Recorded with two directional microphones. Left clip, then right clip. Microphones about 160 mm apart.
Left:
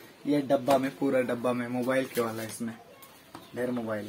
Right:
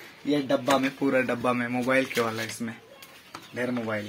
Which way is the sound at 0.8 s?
25° right (ahead or behind).